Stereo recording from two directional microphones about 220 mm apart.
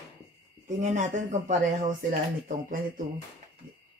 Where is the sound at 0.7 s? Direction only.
35° right (ahead or behind).